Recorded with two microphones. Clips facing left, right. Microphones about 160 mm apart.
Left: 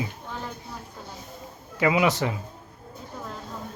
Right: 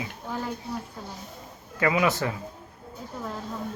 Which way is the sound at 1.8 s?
15° left (ahead or behind).